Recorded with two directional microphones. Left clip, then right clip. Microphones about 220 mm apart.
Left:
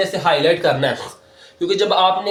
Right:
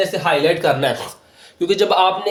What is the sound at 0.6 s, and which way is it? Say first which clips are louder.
Speech: even; 35° right (ahead or behind).